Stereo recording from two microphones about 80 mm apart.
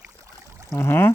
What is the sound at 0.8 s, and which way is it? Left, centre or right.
Speech, left.